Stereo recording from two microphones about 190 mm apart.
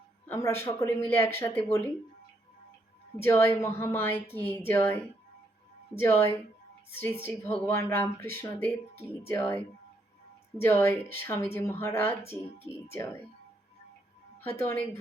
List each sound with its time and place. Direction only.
0.3 s a woman's voice: 15° left (ahead or behind)
3.2 s a woman's voice: 10° left (ahead or behind)
10.6 s a woman's voice: 10° left (ahead or behind)
14.4 s a woman's voice: 10° left (ahead or behind)